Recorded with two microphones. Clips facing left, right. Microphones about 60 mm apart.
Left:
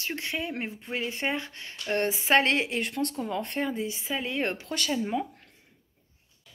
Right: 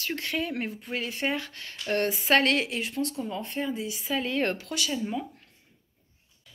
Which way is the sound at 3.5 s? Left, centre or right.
Left.